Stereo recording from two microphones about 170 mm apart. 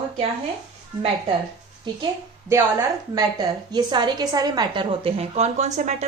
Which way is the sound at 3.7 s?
25° right (ahead or behind).